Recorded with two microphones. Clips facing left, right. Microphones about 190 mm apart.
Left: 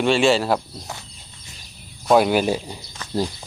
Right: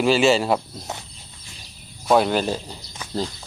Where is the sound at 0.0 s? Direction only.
Centre (ahead or behind).